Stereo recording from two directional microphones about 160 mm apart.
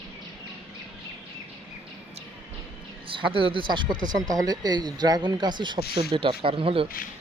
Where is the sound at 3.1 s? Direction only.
30° right (ahead or behind).